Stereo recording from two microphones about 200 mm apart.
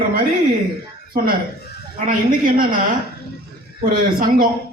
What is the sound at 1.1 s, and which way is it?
Speech, 45° right (ahead or behind).